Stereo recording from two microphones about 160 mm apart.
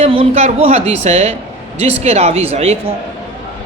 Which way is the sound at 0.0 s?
40° right (ahead or behind).